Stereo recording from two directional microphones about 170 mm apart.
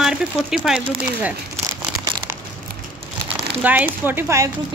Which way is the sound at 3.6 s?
10° right (ahead or behind).